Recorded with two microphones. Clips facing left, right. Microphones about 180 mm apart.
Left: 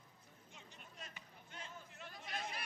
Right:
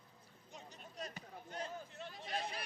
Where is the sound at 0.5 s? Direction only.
40° right (ahead or behind).